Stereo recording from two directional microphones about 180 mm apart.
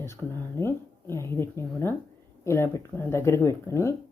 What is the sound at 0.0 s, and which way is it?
Speech, 15° left (ahead or behind).